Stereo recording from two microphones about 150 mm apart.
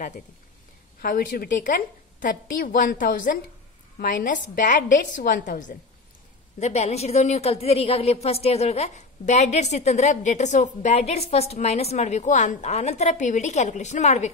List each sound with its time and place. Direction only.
1.0 s a woman's voice: 65° left (ahead or behind)
6.6 s a woman's voice: 45° left (ahead or behind)